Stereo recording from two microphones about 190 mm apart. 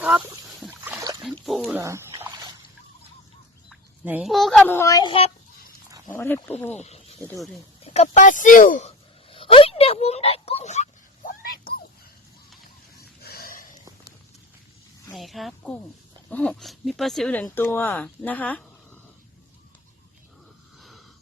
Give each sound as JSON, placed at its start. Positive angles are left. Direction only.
{"t": 0.0, "sound": "a sound", "side_deg": -10}
{"t": 1.2, "sound": "dog", "side_deg": 0}
{"t": 1.7, "sound": "splash", "side_deg": -15}
{"t": 3.7, "sound": "speech", "side_deg": -5}
{"t": 6.1, "sound": "speech", "side_deg": 10}
{"t": 6.7, "sound": "snake", "side_deg": 35}
{"t": 7.9, "sound": "a sound", "side_deg": 35}
{"t": 13.0, "sound": "a sound", "side_deg": 55}
{"t": 15.1, "sound": "speech", "side_deg": 0}